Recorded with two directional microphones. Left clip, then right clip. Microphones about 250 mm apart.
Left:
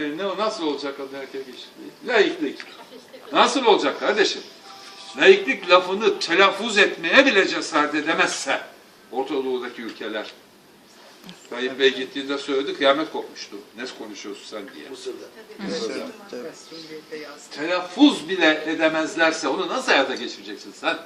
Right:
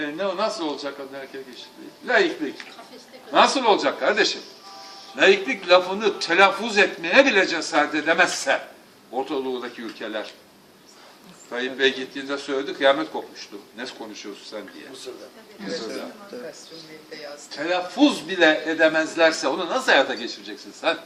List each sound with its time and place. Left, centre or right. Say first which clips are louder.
0.0 s a man's voice: even; centre
2.4 s a man's voice: left 2 dB; centre
11.5 s a man's voice: left 2 dB; centre
17.9 s a man's voice: left 4 dB; centre